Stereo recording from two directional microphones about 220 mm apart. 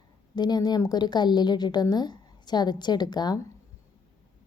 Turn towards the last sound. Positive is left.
turn(degrees=20)  # may be behind; listen again after turning